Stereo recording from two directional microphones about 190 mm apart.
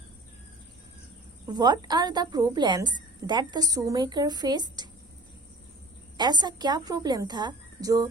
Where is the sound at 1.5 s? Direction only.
20° right (ahead or behind).